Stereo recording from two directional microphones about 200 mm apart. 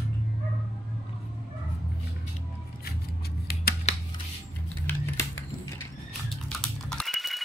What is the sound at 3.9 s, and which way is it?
Scissors, 35° left (ahead or behind).